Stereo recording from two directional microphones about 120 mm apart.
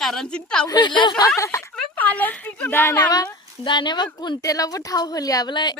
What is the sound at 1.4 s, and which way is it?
Speech, 25° left (ahead or behind).